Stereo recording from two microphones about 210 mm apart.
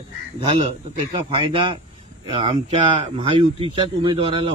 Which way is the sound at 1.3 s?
25° right (ahead or behind).